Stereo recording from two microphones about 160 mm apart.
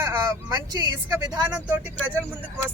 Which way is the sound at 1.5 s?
10° right (ahead or behind).